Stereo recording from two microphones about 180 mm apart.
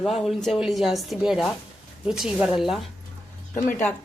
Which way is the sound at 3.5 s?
45° left (ahead or behind).